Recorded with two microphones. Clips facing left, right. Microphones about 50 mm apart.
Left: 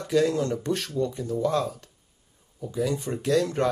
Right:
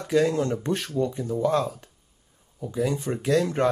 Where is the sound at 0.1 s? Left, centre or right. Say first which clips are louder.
Right 1 dB; centre.